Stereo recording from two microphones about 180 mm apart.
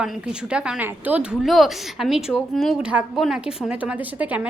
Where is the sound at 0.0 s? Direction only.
5° right (ahead or behind).